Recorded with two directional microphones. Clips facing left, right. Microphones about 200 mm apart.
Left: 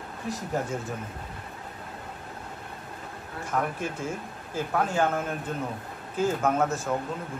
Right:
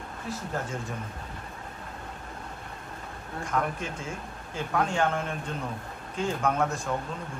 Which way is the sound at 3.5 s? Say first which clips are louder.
Left 1 dB; 5° left (ahead or behind).